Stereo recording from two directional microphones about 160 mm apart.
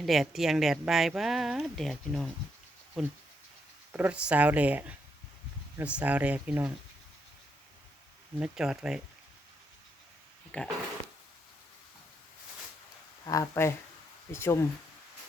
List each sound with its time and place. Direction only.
0.0 s speech: centre (ahead or behind)
3.9 s speech: 10° right (ahead or behind)
8.4 s speech: 5° right (ahead or behind)
10.5 s speech: 10° left (ahead or behind)
13.2 s speech: 20° left (ahead or behind)